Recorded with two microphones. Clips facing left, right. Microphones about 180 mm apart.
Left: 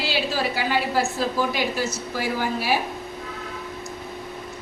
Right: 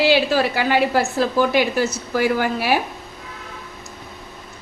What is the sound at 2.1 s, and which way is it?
Speech, 65° right (ahead or behind).